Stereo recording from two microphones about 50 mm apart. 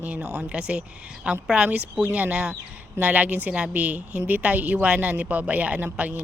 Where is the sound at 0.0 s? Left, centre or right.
Right.